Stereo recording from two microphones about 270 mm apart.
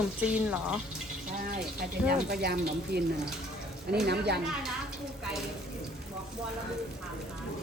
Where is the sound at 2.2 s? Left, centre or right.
Right.